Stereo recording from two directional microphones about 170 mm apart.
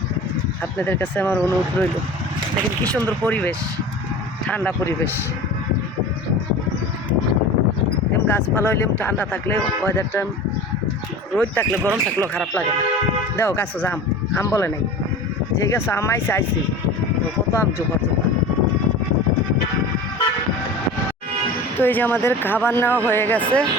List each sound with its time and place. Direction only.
0.8 s speech: 10° left (ahead or behind)
2.9 s speech: 10° left (ahead or behind)
8.3 s speech: 10° left (ahead or behind)
11.3 s speech: 10° left (ahead or behind)
11.8 s speech: 15° right (ahead or behind)
12.3 s speech: 5° left (ahead or behind)
17.5 s speech: 15° left (ahead or behind)
21.8 s speech: 10° left (ahead or behind)